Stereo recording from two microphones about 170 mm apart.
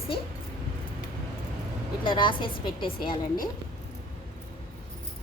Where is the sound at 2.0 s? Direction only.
25° left (ahead or behind).